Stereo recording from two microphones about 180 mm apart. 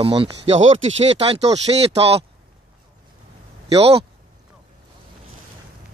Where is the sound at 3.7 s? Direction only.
35° right (ahead or behind).